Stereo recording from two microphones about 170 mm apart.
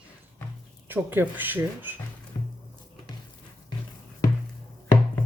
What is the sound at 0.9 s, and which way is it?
Speech, 10° right (ahead or behind).